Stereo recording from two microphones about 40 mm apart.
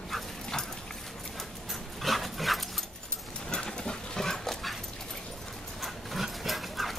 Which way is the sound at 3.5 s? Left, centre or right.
Centre.